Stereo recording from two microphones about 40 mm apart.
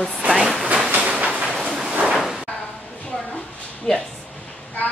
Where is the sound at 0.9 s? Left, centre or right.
Right.